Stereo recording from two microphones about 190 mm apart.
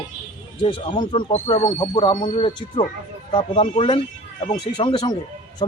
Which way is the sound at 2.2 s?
35° left (ahead or behind).